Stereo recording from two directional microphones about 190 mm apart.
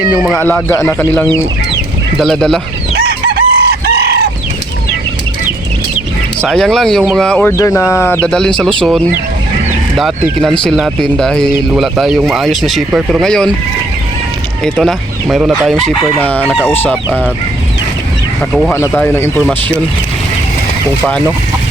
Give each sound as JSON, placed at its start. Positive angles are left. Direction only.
{"t": 0.2, "sound": "speech", "side_deg": 5}
{"t": 3.0, "sound": "chicken", "side_deg": -55}
{"t": 6.4, "sound": "speech", "side_deg": 5}
{"t": 10.0, "sound": "speech", "side_deg": 5}
{"t": 14.6, "sound": "speech", "side_deg": 0}
{"t": 15.9, "sound": "speech", "side_deg": 10}
{"t": 17.1, "sound": "fowl", "side_deg": -5}
{"t": 18.7, "sound": "speech", "side_deg": 10}